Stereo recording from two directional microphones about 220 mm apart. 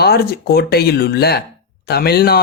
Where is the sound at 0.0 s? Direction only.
45° left (ahead or behind).